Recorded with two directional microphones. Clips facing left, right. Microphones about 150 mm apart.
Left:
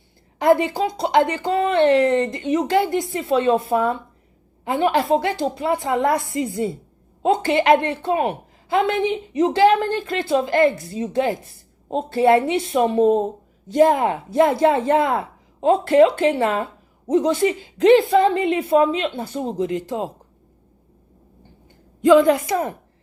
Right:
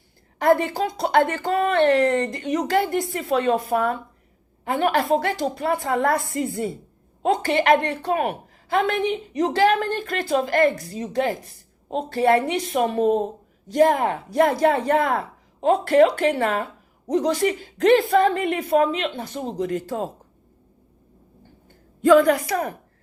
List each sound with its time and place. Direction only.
0.4 s a woman's voice: 20° left (ahead or behind)
4.7 s a woman's voice: 20° left (ahead or behind)
19.6 s a woman's voice: 20° left (ahead or behind)
22.0 s a woman's voice: 20° left (ahead or behind)